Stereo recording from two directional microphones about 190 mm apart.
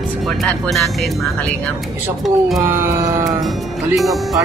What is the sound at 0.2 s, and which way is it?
Speech, centre (ahead or behind).